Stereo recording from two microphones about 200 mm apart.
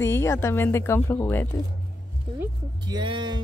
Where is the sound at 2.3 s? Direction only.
20° right (ahead or behind).